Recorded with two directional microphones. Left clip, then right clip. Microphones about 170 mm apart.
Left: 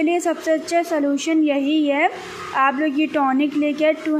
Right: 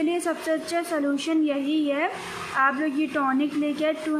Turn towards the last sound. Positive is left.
turn(degrees=30)  # may be behind; listen again after turning